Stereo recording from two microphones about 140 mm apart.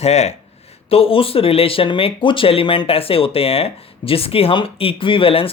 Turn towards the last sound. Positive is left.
turn(degrees=40)  # may be behind; listen again after turning